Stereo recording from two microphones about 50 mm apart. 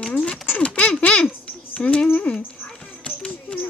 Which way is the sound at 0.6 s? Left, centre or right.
Left.